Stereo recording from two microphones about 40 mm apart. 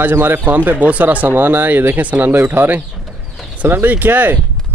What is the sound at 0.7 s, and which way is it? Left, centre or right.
Speech, right.